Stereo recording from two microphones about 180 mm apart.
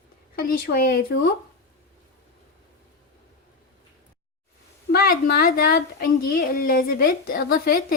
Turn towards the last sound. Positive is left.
turn(degrees=55)  # may be behind; listen again after turning